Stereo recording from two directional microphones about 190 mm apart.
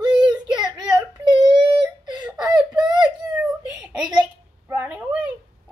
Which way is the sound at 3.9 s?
20° right (ahead or behind).